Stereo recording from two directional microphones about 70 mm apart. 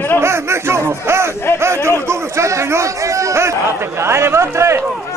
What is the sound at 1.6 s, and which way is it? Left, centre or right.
A man's voice, right.